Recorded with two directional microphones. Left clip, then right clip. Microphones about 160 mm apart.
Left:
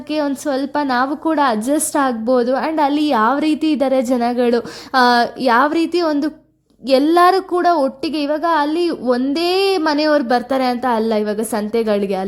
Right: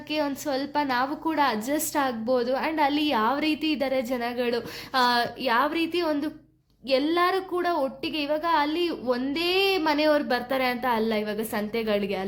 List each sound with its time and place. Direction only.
0.1 s a woman's voice: 45° left (ahead or behind)